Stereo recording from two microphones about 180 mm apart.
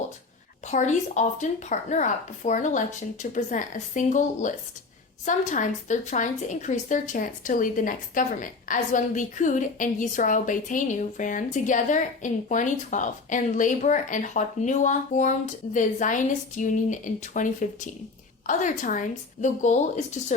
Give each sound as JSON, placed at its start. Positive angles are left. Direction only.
{"t": 0.7, "sound": "a woman's voice", "side_deg": 40}